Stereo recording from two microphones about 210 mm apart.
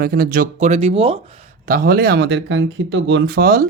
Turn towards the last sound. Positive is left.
turn(degrees=-45)  # may be behind; listen again after turning